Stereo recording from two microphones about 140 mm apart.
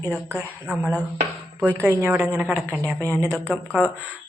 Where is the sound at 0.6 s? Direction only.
10° right (ahead or behind).